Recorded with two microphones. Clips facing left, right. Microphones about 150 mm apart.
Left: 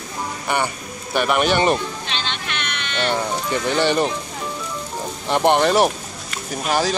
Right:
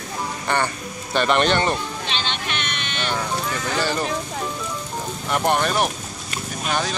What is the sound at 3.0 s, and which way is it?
Speech, 25° left (ahead or behind).